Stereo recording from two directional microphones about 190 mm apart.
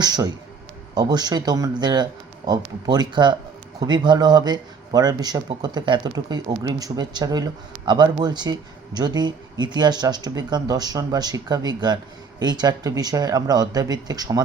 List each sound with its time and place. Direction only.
0.0 s speech: 20° right (ahead or behind)